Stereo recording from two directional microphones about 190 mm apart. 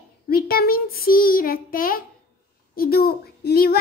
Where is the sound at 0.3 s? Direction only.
50° left (ahead or behind).